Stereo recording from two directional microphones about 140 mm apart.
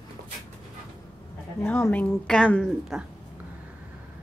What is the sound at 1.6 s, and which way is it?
Speech, 15° left (ahead or behind).